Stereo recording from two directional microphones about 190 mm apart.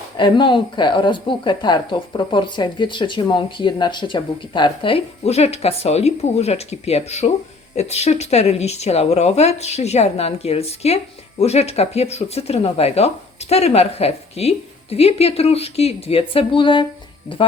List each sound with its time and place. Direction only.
0.2 s speech: 25° left (ahead or behind)